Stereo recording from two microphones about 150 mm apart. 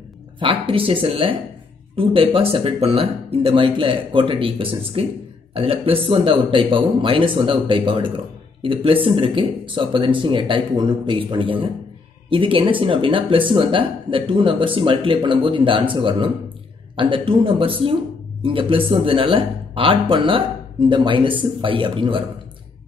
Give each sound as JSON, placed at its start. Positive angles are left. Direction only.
{"t": 0.4, "sound": "speech", "side_deg": -35}